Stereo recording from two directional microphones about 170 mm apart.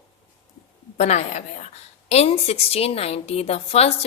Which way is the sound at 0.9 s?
40° left (ahead or behind).